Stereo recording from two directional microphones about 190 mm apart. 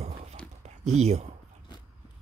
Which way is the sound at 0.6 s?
35° right (ahead or behind).